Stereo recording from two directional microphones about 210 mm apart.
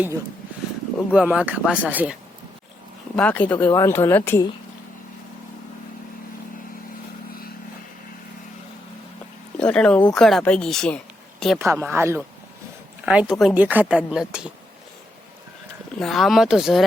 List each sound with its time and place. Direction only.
1.1 s speech: 5° right (ahead or behind)
3.2 s speech: 5° left (ahead or behind)
9.6 s speech: 5° left (ahead or behind)
11.7 s speech: 10° right (ahead or behind)
16.0 s speech: centre (ahead or behind)